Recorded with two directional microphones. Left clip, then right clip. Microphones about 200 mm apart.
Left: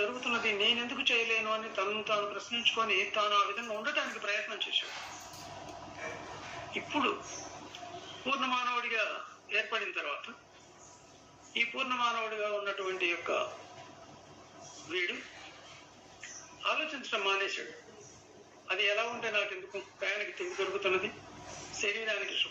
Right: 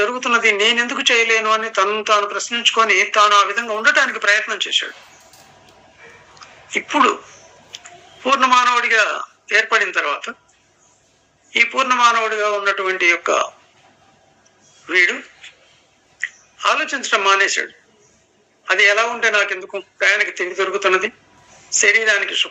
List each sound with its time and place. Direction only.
0.0 s speech: 50° right (ahead or behind)
6.9 s speech: 50° right (ahead or behind)
8.2 s speech: 50° right (ahead or behind)
11.5 s speech: 50° right (ahead or behind)
14.8 s speech: 50° right (ahead or behind)
16.6 s speech: 50° right (ahead or behind)
18.7 s speech: 50° right (ahead or behind)